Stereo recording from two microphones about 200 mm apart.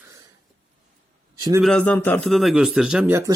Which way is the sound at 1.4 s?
15° right (ahead or behind).